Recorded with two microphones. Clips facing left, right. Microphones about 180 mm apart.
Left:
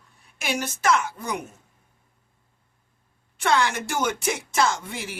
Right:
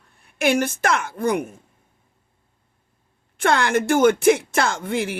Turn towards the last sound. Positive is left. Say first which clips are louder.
# right 3 dB
turn(degrees=-55)  # may be behind; listen again after turning